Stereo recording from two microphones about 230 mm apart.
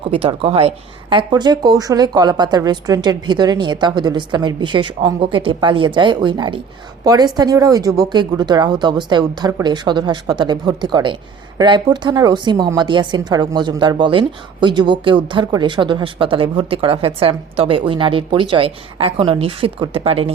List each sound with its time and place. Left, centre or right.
0.1 s a woman's voice: right